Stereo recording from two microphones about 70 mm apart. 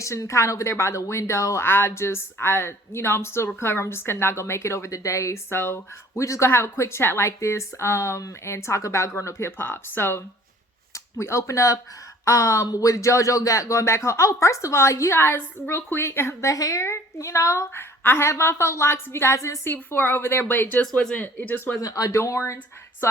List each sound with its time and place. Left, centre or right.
0.0 s a woman's voice: left
19.6 s a woman's voice: left
21.8 s speech: left